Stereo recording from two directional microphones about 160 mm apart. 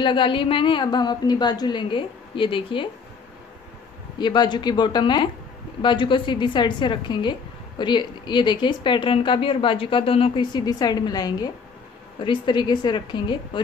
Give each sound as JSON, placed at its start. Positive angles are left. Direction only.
{"t": 0.0, "sound": "a woman's voice", "side_deg": 30}
{"t": 4.2, "sound": "a woman's voice", "side_deg": 30}